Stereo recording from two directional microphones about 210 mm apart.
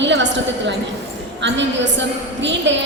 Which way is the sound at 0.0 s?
55° right (ahead or behind).